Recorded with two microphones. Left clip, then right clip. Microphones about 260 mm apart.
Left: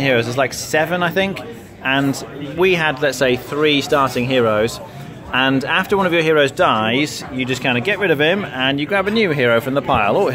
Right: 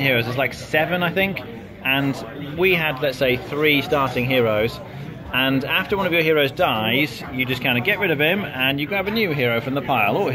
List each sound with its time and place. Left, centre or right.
0.0 s speech: left